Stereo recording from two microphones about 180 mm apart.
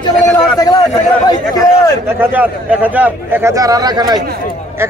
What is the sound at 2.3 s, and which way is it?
A man's voice, 10° right (ahead or behind).